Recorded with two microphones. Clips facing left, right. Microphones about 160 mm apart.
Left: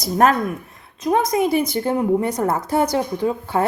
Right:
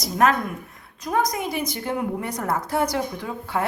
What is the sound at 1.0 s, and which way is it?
A woman's voice, 25° left (ahead or behind).